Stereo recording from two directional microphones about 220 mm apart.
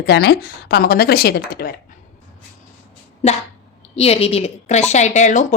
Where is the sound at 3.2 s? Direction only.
30° left (ahead or behind).